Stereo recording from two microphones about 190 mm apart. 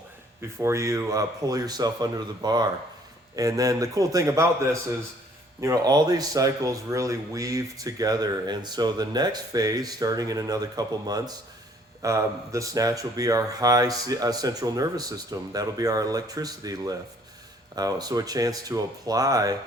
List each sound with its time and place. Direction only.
0.6 s a man's voice: 15° right (ahead or behind)